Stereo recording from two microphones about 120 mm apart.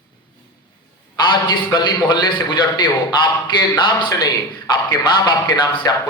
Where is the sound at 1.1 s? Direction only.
40° left (ahead or behind).